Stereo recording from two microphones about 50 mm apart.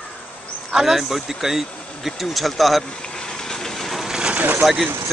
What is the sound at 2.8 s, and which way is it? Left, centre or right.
Vehicle, centre.